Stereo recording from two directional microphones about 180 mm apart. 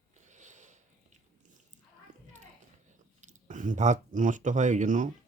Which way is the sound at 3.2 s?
40° right (ahead or behind).